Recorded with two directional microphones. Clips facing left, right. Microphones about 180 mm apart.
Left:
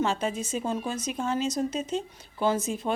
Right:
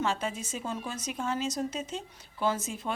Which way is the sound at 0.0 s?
25° left (ahead or behind).